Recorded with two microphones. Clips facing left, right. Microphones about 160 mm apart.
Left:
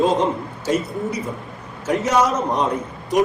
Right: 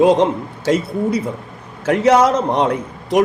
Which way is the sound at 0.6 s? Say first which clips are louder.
Right 5 dB; 65° right (ahead or behind).